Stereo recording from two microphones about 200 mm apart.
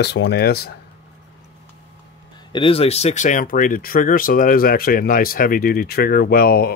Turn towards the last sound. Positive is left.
turn(degrees=50)  # may be behind; listen again after turning